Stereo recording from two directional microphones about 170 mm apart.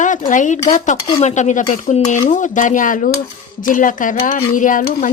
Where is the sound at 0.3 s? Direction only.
50° left (ahead or behind).